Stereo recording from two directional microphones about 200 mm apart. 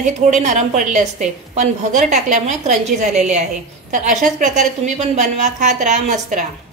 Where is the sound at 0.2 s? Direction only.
35° right (ahead or behind).